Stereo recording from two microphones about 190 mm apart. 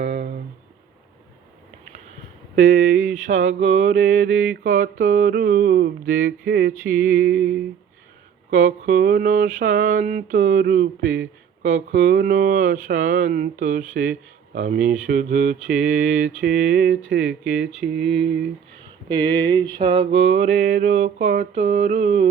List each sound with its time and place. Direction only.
0.0 s a sound: 40° right (ahead or behind)
2.6 s a sound: 45° right (ahead or behind)
3.3 s mantra: 75° right (ahead or behind)
4.1 s mantra: 45° right (ahead or behind)
7.3 s a sound: 10° right (ahead or behind)
8.4 s mantra: 40° right (ahead or behind)
13.9 s speech: 45° right (ahead or behind)
15.0 s mantra: 45° right (ahead or behind)
17.9 s mantra: centre (ahead or behind)
19.0 s a sound: 25° right (ahead or behind)
20.1 s mantra: 70° right (ahead or behind)
21.3 s mantra: 40° right (ahead or behind)